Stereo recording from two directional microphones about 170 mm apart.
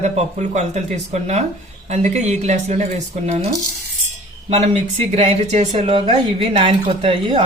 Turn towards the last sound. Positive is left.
turn(degrees=-30)  # may be behind; listen again after turning